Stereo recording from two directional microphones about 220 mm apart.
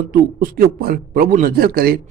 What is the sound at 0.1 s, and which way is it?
A man's voice, 40° right (ahead or behind).